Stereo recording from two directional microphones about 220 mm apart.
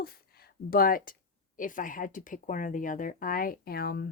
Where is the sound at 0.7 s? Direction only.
40° left (ahead or behind).